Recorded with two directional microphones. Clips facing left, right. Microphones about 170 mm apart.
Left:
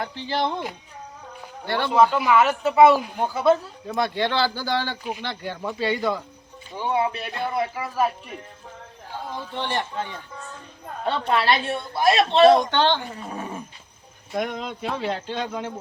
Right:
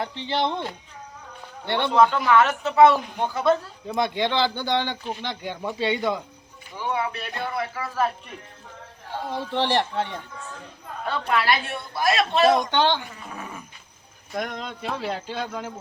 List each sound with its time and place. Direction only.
0.0 s speech: 25° right (ahead or behind)
1.8 s speech: 5° left (ahead or behind)
3.8 s speech: 15° right (ahead or behind)
6.7 s speech: 25° left (ahead or behind)
9.3 s speech: 70° right (ahead or behind)
11.0 s speech: 30° left (ahead or behind)
12.7 s speech: 10° right (ahead or behind)
13.1 s speech: 30° left (ahead or behind)
14.3 s speech: centre (ahead or behind)